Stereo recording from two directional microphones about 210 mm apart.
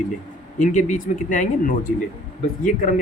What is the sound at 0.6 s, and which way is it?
Speech, 35° left (ahead or behind).